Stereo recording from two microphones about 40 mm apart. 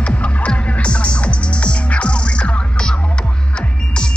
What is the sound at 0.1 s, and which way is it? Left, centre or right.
Music, left.